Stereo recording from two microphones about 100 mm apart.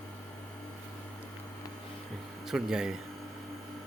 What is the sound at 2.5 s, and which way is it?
Speech, 5° right (ahead or behind).